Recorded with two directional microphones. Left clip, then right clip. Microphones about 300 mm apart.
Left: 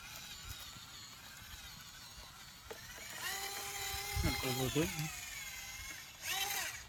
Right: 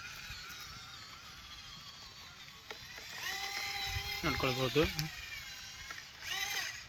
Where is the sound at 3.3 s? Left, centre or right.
Centre.